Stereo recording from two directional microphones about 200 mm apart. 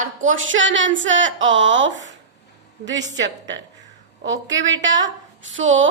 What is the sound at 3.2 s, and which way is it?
A woman's voice, 65° right (ahead or behind).